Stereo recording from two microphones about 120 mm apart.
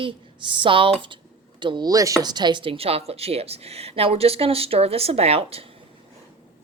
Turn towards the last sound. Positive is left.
turn(degrees=-55)  # may be behind; listen again after turning